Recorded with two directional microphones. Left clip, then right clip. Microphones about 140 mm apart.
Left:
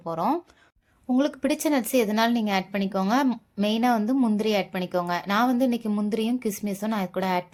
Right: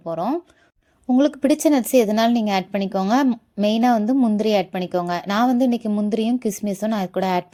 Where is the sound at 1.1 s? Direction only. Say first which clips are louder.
Right 6 dB; 35° right (ahead or behind).